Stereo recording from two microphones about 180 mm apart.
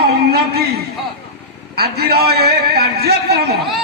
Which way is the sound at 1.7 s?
60° right (ahead or behind).